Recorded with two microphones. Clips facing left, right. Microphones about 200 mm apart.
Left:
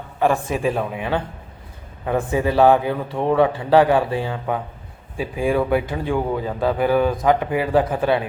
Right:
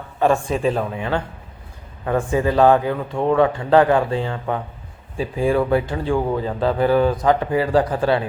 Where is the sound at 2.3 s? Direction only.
15° left (ahead or behind).